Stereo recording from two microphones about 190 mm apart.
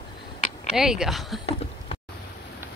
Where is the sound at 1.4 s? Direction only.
30° left (ahead or behind).